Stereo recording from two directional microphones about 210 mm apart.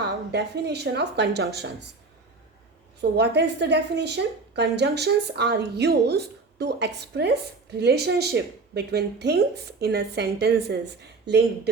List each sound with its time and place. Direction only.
0.3 s a woman's voice: 55° right (ahead or behind)
3.0 s a woman's voice: 55° right (ahead or behind)